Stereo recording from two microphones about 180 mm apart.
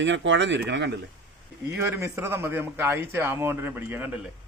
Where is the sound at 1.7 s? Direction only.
15° right (ahead or behind).